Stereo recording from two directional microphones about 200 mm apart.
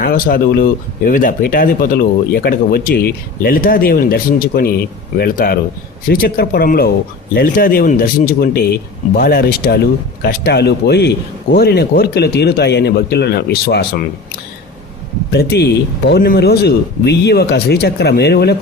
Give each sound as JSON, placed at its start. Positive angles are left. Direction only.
{"t": 0.0, "sound": "speech", "side_deg": 45}
{"t": 15.3, "sound": "speech", "side_deg": 50}